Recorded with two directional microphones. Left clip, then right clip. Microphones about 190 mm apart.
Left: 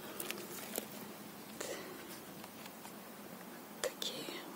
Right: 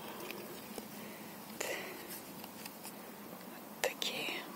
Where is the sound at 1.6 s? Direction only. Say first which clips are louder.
Right 4 dB; centre (ahead or behind).